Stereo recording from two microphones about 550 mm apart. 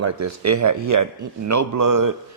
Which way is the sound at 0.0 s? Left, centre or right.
Right.